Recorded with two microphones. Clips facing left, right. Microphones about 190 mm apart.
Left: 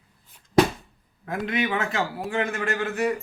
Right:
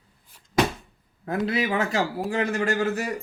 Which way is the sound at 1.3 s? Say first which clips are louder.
Right 1 dB; 35° right (ahead or behind).